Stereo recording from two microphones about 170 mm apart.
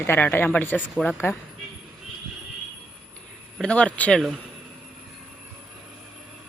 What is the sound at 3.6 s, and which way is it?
Speech, 5° left (ahead or behind).